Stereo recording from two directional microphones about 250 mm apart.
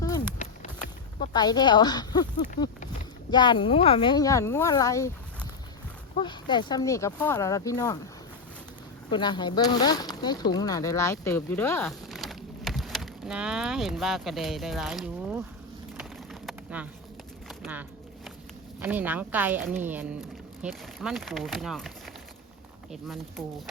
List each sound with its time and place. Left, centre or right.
1.2 s speech: centre
3.2 s speech: centre
9.0 s speech: centre
16.0 s a sound: centre
18.8 s speech: centre